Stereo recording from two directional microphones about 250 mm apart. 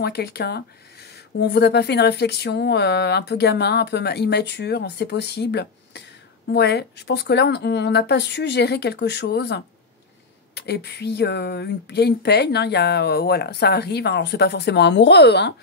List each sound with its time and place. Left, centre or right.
0.0 s speech: left